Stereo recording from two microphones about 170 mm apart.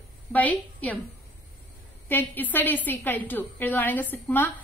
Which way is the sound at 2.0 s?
10° left (ahead or behind).